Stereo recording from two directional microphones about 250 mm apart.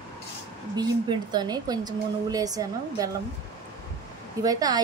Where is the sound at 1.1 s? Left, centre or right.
Centre.